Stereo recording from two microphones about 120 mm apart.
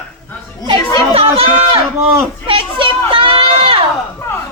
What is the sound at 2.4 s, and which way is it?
Children playing, 45° right (ahead or behind).